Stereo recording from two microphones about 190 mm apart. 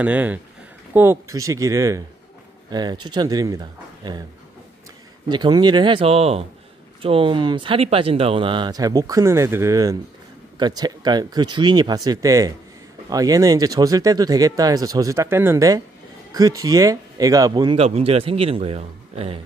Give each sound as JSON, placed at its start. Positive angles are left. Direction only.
{"t": 0.0, "sound": "speech", "side_deg": -10}
{"t": 5.3, "sound": "speech", "side_deg": -20}
{"t": 17.7, "sound": "a man's voice", "side_deg": -35}